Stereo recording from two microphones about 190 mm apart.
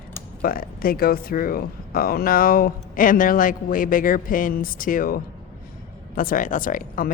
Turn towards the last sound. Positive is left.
turn(degrees=45)  # may be behind; listen again after turning